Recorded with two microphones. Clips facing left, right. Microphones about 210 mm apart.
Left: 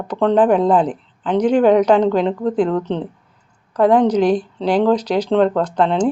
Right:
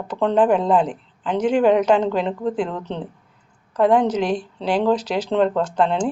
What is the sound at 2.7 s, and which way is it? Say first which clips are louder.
Speech: left 9 dB; 45° left (ahead or behind).